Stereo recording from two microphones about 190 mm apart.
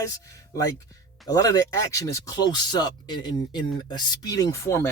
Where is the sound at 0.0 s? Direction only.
15° left (ahead or behind).